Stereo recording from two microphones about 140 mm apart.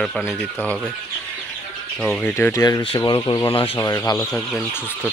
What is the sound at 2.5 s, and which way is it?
Speech, 25° left (ahead or behind).